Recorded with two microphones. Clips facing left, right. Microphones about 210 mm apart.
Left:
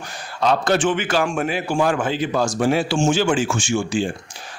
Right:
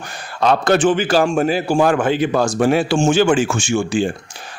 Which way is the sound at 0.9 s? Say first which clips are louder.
Right 5 dB; 35° right (ahead or behind).